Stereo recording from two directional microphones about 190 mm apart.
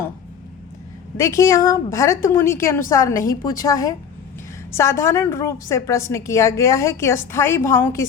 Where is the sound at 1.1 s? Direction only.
15° left (ahead or behind).